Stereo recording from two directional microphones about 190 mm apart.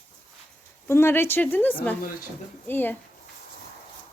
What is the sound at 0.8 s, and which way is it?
Speech, 15° left (ahead or behind).